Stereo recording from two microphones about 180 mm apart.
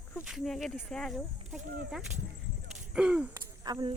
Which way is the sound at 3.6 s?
20° right (ahead or behind).